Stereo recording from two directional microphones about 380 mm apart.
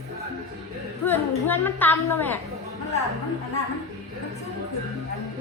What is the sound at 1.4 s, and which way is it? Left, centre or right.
Speech, centre.